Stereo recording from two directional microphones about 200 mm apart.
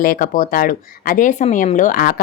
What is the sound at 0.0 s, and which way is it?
Speech, 45° left (ahead or behind).